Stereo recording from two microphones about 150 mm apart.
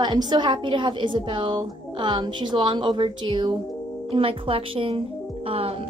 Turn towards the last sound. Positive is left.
turn(degrees=-40)  # may be behind; listen again after turning